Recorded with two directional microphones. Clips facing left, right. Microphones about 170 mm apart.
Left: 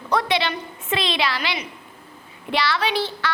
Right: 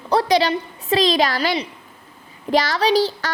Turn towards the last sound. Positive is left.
turn(degrees=-40)  # may be behind; listen again after turning